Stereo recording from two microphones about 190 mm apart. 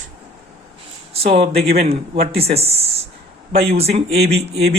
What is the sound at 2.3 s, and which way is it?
Speech, 30° right (ahead or behind).